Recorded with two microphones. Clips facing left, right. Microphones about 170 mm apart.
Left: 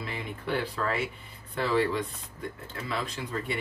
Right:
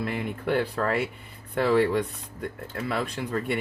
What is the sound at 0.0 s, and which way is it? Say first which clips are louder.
Speech: right 7 dB; 55° right (ahead or behind).